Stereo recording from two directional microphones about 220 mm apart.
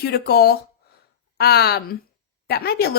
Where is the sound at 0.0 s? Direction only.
45° left (ahead or behind).